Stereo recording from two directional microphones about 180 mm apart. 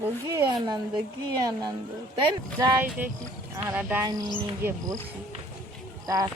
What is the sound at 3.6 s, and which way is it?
Speech, 10° right (ahead or behind).